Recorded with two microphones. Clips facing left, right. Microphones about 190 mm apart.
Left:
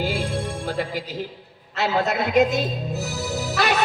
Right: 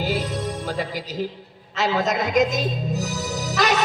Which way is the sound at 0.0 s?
40° right (ahead or behind).